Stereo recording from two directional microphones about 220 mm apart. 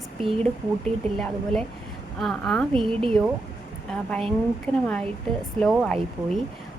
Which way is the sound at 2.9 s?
25° right (ahead or behind).